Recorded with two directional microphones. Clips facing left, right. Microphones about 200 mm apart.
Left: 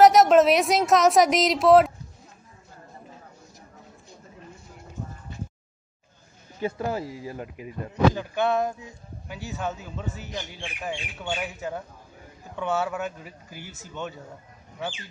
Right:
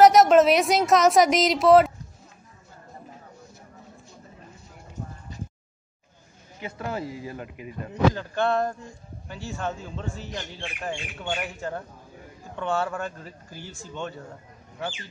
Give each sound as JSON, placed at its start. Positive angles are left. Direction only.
{"t": 0.0, "sound": "a woman's voice", "side_deg": 0}
{"t": 6.6, "sound": "speech", "side_deg": 35}
{"t": 7.0, "sound": "speech", "side_deg": -20}
{"t": 7.2, "sound": "speech", "side_deg": 30}
{"t": 8.1, "sound": "a man's voice", "side_deg": 5}